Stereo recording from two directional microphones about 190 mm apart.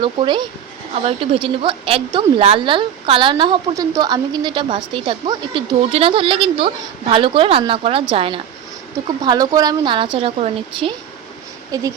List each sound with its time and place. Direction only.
0.0 s a woman's voice: 25° right (ahead or behind)
11.7 s speech: 15° right (ahead or behind)